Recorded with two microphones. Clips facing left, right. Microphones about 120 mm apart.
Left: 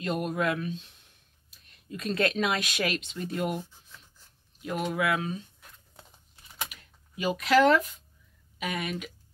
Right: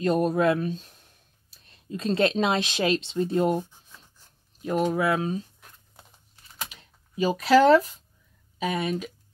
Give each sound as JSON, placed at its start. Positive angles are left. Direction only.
{"t": 0.0, "sound": "speech", "side_deg": -35}
{"t": 6.7, "sound": "speech", "side_deg": -30}